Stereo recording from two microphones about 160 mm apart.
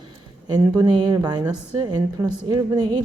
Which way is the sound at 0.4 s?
25° right (ahead or behind).